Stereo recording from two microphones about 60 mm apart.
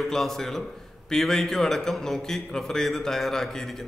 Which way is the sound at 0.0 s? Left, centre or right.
Centre.